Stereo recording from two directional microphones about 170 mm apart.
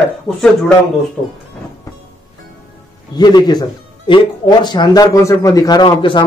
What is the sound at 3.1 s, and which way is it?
A man's voice, 25° left (ahead or behind).